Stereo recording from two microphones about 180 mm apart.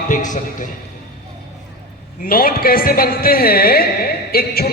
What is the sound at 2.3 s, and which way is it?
A man's voice, 55° left (ahead or behind).